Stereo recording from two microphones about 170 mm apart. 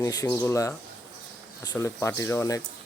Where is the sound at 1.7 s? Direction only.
15° left (ahead or behind).